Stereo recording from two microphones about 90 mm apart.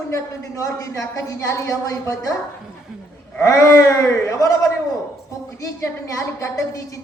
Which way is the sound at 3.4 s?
35° left (ahead or behind).